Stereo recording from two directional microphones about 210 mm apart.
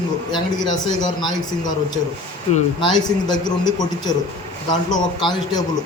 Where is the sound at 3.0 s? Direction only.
20° left (ahead or behind).